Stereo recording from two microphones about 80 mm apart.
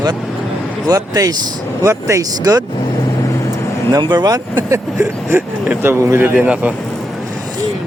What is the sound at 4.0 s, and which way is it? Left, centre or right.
Speech, right.